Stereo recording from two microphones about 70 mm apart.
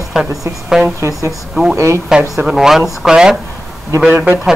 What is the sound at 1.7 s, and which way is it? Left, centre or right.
Speech, right.